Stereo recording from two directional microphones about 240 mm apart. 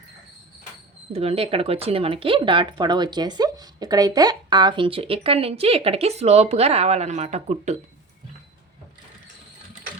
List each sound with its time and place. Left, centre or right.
1.1 s speech: right